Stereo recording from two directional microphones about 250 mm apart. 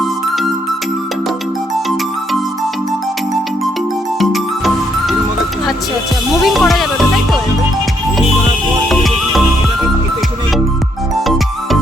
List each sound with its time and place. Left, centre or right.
4.2 s music: centre
6.4 s music: centre
8.9 s music: centre